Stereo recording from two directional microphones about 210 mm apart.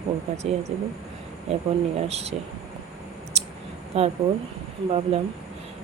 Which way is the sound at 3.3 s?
30° right (ahead or behind).